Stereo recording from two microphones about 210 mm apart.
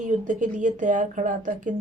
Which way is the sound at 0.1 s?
35° right (ahead or behind).